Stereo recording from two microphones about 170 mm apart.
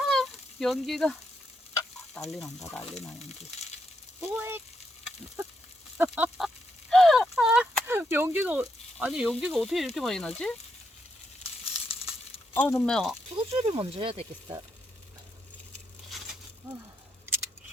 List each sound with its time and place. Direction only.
0.0 s sizzle: centre (ahead or behind)
2.2 s speech: 5° left (ahead or behind)
4.2 s a sound: 10° right (ahead or behind)
6.0 s a sound: 5° right (ahead or behind)
7.9 s speech: 15° right (ahead or behind); by 10.5 s 5° left (ahead or behind)
11.6 s sizzle: 35° left (ahead or behind)
12.5 s speech: 10° left (ahead or behind)
13.4 s speech: 40° right (ahead or behind)
16.0 s a sound: centre (ahead or behind)